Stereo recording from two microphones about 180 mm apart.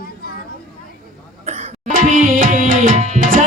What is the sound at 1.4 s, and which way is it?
Tabla, 40° right (ahead or behind).